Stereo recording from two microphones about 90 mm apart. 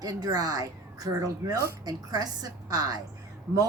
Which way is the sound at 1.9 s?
45° right (ahead or behind).